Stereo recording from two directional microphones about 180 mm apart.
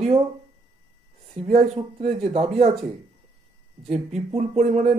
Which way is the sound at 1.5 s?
35° right (ahead or behind).